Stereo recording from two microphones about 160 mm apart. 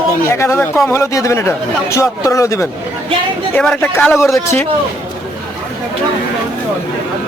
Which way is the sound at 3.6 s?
5° left (ahead or behind).